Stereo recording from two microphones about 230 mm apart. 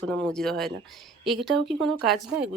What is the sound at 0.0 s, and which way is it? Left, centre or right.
Speech, centre.